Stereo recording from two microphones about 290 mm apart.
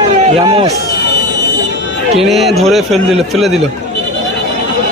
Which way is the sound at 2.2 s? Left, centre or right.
Centre.